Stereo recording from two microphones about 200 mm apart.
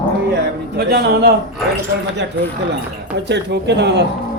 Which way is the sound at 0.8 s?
55° right (ahead or behind).